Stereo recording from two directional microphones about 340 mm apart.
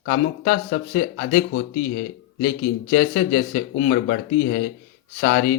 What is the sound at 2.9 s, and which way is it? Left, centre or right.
Speech, left.